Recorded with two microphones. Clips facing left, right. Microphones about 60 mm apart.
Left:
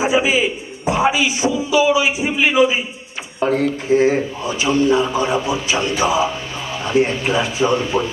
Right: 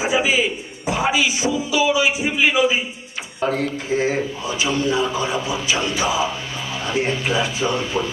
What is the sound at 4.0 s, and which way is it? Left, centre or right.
A man's voice, left.